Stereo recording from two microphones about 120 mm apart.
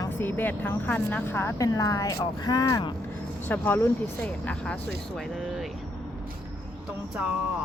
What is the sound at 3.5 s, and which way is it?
Speech, 15° left (ahead or behind).